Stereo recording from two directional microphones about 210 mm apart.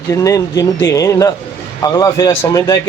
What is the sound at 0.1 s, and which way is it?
A man's voice, 15° left (ahead or behind).